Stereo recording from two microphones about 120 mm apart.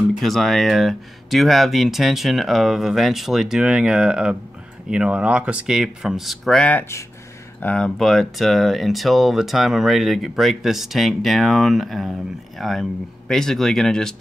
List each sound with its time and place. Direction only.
0.2 s speech: centre (ahead or behind)
6.8 s speech: 25° left (ahead or behind)
7.6 s speech: 5° left (ahead or behind)